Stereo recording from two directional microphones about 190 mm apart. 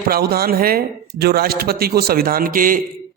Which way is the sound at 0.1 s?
55° right (ahead or behind).